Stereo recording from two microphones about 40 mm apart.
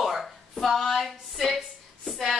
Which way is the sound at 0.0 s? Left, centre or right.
Centre.